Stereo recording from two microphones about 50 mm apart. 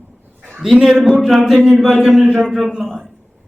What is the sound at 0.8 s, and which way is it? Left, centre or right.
A man's voice, centre.